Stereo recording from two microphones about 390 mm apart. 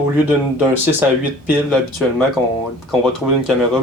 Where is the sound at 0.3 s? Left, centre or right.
Centre.